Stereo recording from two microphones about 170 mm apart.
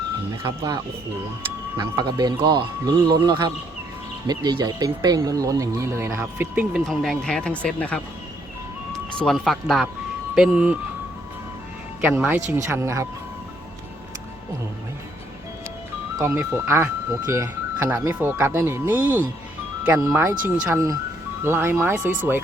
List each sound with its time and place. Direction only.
0.4 s speech: 20° right (ahead or behind)
6.8 s speech: centre (ahead or behind)
12.0 s speech: 10° right (ahead or behind)
16.1 s speech: 15° right (ahead or behind)